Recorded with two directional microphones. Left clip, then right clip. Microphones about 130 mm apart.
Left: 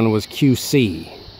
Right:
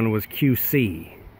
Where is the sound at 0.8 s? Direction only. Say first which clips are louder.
Left 5 dB; 30° left (ahead or behind).